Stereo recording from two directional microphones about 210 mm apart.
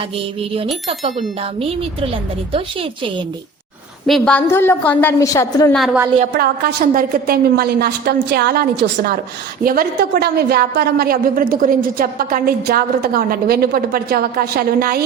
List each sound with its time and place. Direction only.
2.5 s a woman's voice: 25° right (ahead or behind)
4.0 s a woman's voice: 5° left (ahead or behind)
5.7 s a woman's voice: centre (ahead or behind)
6.3 s a woman's voice: 45° right (ahead or behind)